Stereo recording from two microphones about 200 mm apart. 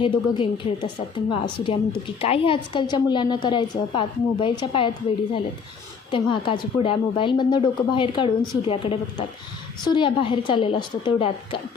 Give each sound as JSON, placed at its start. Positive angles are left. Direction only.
{"t": 0.0, "sound": "a woman's voice", "side_deg": 25}
{"t": 6.1, "sound": "a woman's voice", "side_deg": 25}